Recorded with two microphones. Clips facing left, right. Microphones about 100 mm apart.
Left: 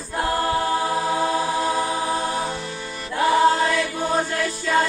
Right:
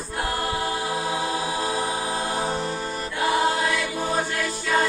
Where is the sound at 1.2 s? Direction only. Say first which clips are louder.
Left 4 dB; 40° left (ahead or behind).